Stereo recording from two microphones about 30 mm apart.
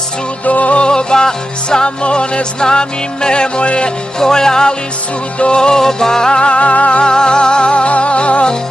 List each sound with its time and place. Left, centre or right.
0.5 s music: left
0.7 s music: left
2.0 s music: left
2.6 s music: left
4.2 s music: left
6.3 s music: left
6.6 s music: left
7.0 s music: left